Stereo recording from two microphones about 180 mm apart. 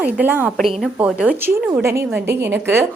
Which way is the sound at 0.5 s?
Centre (ahead or behind).